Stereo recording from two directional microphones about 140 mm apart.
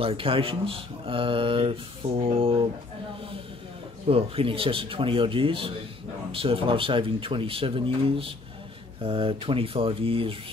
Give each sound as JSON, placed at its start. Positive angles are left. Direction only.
{"t": 0.0, "sound": "speech", "side_deg": -40}
{"t": 4.1, "sound": "speech", "side_deg": -40}